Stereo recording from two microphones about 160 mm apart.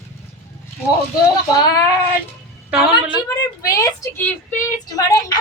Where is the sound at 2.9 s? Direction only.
25° left (ahead or behind).